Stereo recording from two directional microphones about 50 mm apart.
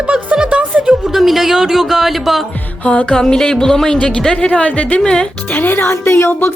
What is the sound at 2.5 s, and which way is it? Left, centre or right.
Music, left.